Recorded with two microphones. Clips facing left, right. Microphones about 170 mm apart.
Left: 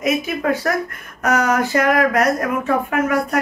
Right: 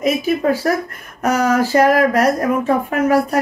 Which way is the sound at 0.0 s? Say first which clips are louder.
Right 3 dB; 35° right (ahead or behind).